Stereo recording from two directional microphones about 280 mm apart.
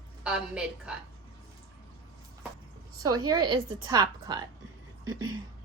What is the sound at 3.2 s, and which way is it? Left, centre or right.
A woman's voice, centre.